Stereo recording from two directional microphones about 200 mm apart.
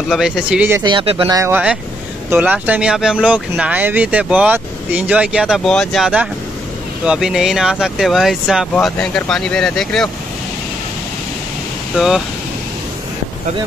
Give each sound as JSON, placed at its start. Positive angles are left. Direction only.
{"t": 0.1, "sound": "speech", "side_deg": -5}
{"t": 0.8, "sound": "speech", "side_deg": -25}
{"t": 1.2, "sound": "speech", "side_deg": -15}
{"t": 11.9, "sound": "speech", "side_deg": -5}